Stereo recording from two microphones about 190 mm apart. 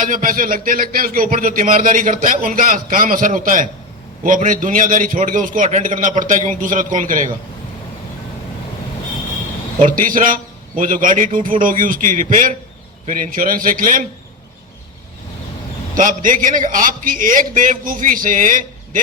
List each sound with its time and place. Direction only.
0.0 s a man's voice: 45° right (ahead or behind)
9.8 s a man's voice: 45° right (ahead or behind)
16.0 s a man's voice: 45° right (ahead or behind)